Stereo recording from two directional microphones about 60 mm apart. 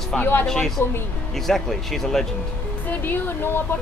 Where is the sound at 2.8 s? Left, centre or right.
Left.